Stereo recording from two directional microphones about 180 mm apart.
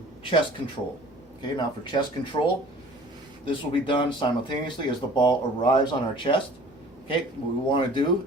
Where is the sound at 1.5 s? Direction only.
25° left (ahead or behind).